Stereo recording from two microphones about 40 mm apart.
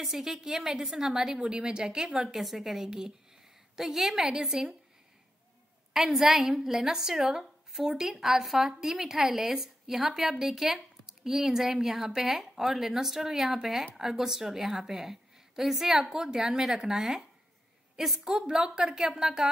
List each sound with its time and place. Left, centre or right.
0.0 s a woman's voice: centre
2.2 s a woman's voice: centre
5.9 s a woman's voice: centre
18.2 s a woman's voice: centre